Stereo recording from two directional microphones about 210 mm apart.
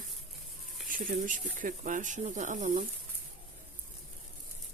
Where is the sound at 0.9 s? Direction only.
40° right (ahead or behind).